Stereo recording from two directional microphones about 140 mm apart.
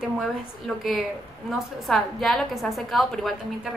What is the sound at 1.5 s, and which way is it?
A woman's voice, centre (ahead or behind).